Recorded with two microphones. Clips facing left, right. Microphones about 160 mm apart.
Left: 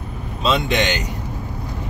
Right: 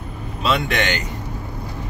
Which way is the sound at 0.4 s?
20° left (ahead or behind).